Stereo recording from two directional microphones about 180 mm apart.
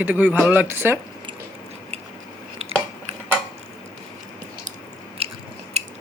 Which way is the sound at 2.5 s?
35° right (ahead or behind).